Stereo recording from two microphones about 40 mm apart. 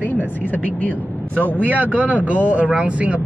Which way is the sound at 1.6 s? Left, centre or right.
Right.